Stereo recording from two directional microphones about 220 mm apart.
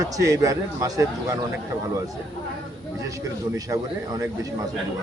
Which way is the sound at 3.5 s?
15° right (ahead or behind).